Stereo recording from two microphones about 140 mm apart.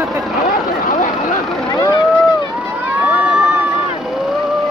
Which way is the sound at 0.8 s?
60° left (ahead or behind).